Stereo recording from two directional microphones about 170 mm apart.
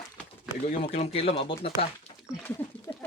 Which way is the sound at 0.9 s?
35° left (ahead or behind).